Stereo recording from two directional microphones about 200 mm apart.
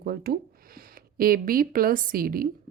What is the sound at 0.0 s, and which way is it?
Speech, 50° right (ahead or behind).